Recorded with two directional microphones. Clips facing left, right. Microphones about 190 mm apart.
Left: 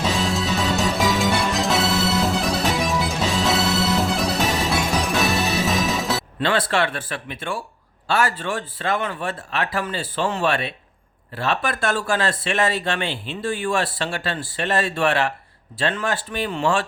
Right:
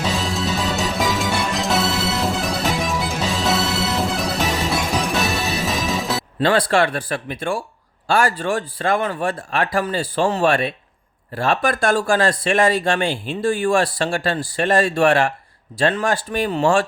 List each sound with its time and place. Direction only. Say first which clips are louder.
0.1 s music: even; centre (ahead or behind)
6.4 s speech: right 5 dB; 40° right (ahead or behind)